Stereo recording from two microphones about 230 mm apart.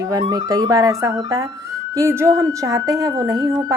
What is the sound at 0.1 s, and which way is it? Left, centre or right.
A woman's voice, centre.